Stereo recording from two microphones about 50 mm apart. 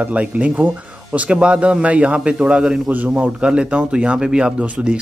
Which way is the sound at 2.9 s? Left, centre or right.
Right.